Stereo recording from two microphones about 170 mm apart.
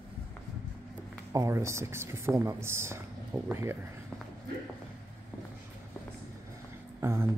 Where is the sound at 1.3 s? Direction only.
20° right (ahead or behind).